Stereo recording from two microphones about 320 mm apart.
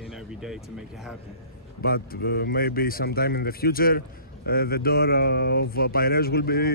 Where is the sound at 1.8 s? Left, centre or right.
Left.